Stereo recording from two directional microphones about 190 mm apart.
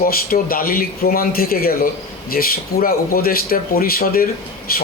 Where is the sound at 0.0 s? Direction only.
50° left (ahead or behind).